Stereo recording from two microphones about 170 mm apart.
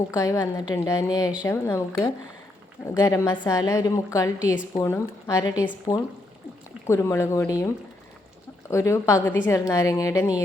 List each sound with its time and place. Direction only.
0.1 s a woman's voice: 20° left (ahead or behind)
8.7 s a woman's voice: 15° left (ahead or behind)